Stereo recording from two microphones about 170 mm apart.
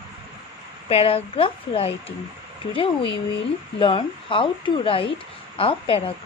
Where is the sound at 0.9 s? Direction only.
35° left (ahead or behind).